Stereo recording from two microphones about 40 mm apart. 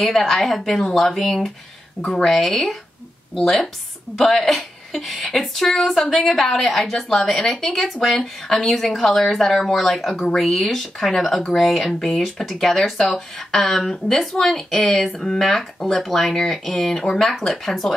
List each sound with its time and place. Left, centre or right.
0.0 s a woman's voice: centre
2.2 s speech: centre
11.9 s speech: centre
12.2 s speech: centre